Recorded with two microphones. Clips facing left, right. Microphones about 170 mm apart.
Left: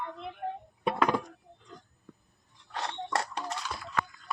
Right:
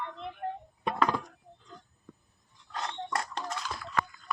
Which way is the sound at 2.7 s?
30° left (ahead or behind).